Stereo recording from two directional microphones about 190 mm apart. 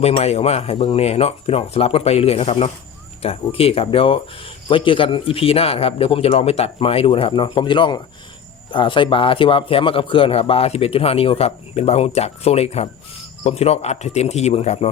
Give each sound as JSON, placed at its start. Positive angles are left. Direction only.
{"t": 0.0, "sound": "speech", "side_deg": 35}